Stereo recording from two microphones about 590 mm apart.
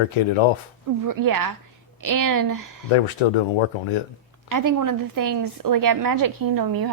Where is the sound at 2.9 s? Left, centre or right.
Left.